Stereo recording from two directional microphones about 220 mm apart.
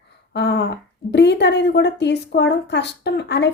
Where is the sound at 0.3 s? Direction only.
50° left (ahead or behind).